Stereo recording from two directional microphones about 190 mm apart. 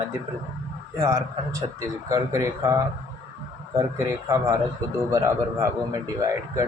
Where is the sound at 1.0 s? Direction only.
15° right (ahead or behind).